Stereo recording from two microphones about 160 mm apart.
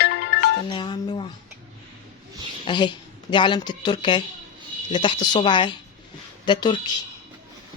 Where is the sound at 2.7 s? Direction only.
30° left (ahead or behind).